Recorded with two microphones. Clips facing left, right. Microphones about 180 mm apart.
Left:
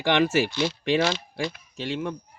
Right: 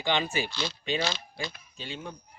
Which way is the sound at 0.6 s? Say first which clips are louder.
Left 8 dB; 70° left (ahead or behind).